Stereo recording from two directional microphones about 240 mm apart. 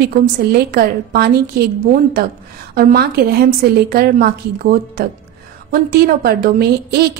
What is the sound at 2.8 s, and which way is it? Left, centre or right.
A woman's voice, right.